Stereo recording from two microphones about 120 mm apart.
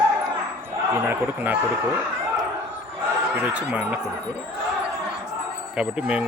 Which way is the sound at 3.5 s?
10° right (ahead or behind).